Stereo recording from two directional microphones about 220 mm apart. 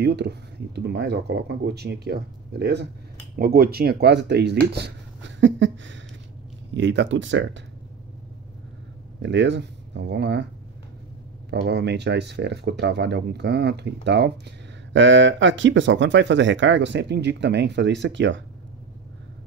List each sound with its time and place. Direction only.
0.0 s speech: 50° right (ahead or behind)
9.2 s speech: 55° right (ahead or behind)
11.6 s speech: 50° right (ahead or behind)